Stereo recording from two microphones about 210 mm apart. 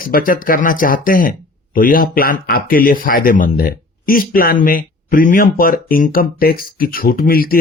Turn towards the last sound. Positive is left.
turn(degrees=45)  # may be behind; listen again after turning